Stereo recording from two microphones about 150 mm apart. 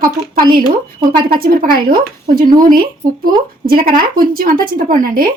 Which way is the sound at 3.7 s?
75° right (ahead or behind).